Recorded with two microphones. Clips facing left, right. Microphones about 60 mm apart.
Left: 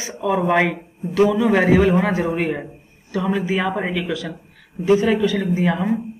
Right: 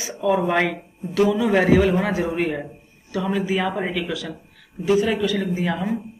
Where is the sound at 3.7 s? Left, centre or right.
Centre.